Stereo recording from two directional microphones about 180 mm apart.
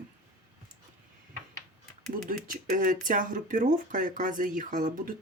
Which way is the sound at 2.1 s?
50° right (ahead or behind).